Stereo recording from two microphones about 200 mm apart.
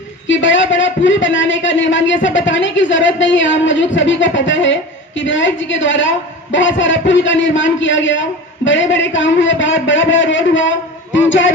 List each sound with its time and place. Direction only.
0.3 s speech: 70° left (ahead or behind)